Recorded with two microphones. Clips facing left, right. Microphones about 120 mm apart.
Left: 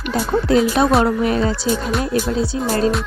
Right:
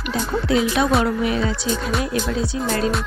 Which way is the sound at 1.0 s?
40° left (ahead or behind).